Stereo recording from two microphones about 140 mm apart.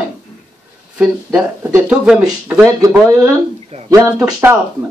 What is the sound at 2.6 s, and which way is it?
Speech, 20° right (ahead or behind).